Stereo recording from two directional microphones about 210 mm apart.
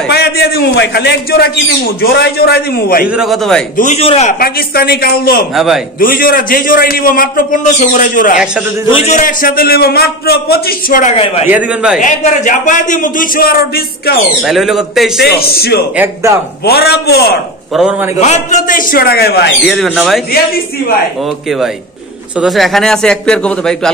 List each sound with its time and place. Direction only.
0.1 s a man's voice: 50° left (ahead or behind)
3.1 s speech: centre (ahead or behind)
3.7 s a man's voice: 35° left (ahead or behind)
8.8 s a man's voice: 30° left (ahead or behind)
11.4 s speech: 5° right (ahead or behind)
12.0 s speech: 35° left (ahead or behind)
14.4 s speech: centre (ahead or behind)
15.2 s a man's voice: 45° left (ahead or behind)
16.0 s a man's voice: 15° right (ahead or behind)
16.6 s a man's voice: 50° left (ahead or behind)
18.2 s a man's voice: 35° left (ahead or behind); by 19.5 s 50° left (ahead or behind)
19.7 s speech: centre (ahead or behind)
22.4 s speech: centre (ahead or behind)